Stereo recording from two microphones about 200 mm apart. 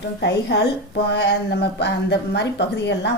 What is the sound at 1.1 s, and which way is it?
A woman's voice, 55° left (ahead or behind).